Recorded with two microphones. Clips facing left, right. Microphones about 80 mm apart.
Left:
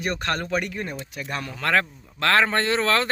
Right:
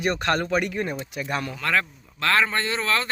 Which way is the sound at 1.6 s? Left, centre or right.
Left.